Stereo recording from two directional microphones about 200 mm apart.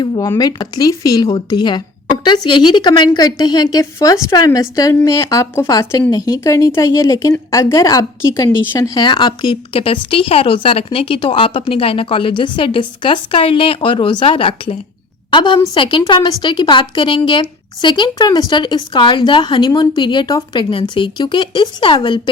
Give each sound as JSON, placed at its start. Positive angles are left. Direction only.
{"t": 0.0, "sound": "a woman's voice", "side_deg": 20}